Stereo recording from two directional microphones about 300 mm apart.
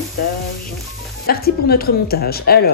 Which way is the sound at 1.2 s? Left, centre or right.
Left.